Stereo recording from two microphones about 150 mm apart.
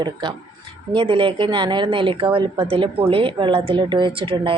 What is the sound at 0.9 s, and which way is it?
Speech, 35° right (ahead or behind).